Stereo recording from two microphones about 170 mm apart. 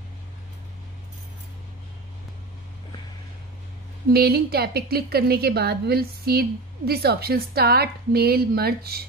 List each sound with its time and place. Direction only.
4.1 s a woman's voice: 65° right (ahead or behind)